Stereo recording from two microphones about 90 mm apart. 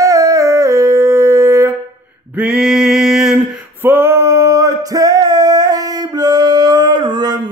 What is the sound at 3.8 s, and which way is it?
Male singing, 25° right (ahead or behind).